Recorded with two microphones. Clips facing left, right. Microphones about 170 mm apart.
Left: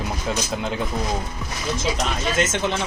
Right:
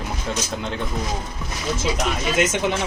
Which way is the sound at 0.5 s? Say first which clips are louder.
Left 2 dB; centre (ahead or behind).